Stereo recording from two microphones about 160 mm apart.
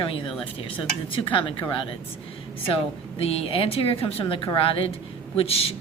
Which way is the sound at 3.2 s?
40° left (ahead or behind).